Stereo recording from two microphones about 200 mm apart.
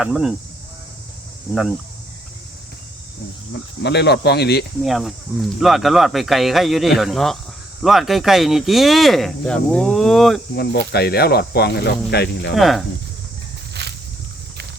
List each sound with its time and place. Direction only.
0.0 s speech: centre (ahead or behind)
1.5 s speech: 5° right (ahead or behind)
3.5 s speech: 55° left (ahead or behind)
4.8 s speech: centre (ahead or behind)
10.5 s speech: 55° left (ahead or behind)
12.5 s speech: centre (ahead or behind)
13.8 s a sound: 55° right (ahead or behind)